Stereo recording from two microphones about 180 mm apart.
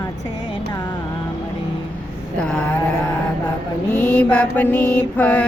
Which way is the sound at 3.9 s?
5° left (ahead or behind).